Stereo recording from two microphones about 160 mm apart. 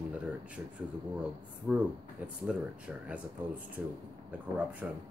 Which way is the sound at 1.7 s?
10° right (ahead or behind).